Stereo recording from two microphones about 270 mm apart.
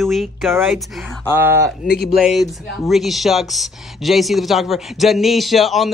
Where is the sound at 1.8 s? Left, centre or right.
Left.